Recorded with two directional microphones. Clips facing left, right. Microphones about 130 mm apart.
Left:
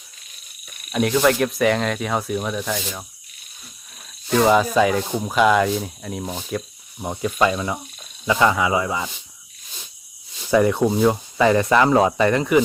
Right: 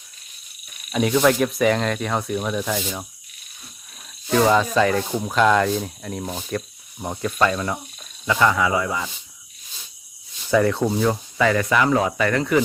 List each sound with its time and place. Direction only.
0.9 s cricket: centre (ahead or behind)
4.3 s speech: 10° left (ahead or behind)
10.5 s speech: 15° left (ahead or behind)